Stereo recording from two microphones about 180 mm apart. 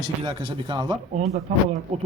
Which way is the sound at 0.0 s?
25° right (ahead or behind).